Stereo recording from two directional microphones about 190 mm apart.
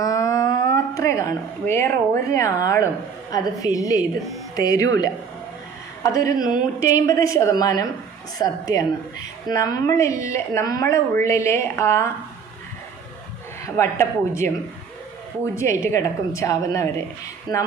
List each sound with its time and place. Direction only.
0.0 s a sound: 15° left (ahead or behind)
1.6 s a woman's voice: 15° left (ahead or behind)
13.7 s a woman's voice: 15° left (ahead or behind)
15.5 s a woman's voice: 15° left (ahead or behind)